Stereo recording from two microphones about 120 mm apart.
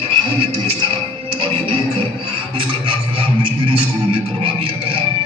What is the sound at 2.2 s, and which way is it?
Music, 45° right (ahead or behind).